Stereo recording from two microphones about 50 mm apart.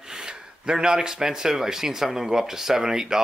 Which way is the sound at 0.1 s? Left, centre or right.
Centre.